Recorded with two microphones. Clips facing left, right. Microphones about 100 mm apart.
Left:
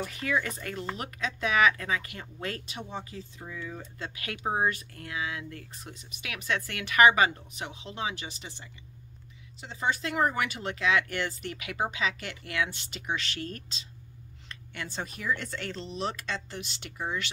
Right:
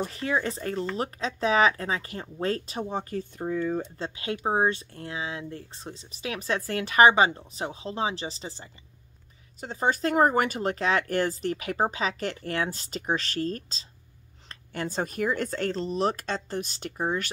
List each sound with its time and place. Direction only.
0.0 s speech: 30° right (ahead or behind); by 3.8 s 45° right (ahead or behind)
3.8 s speech: 25° right (ahead or behind)
9.6 s speech: 45° right (ahead or behind)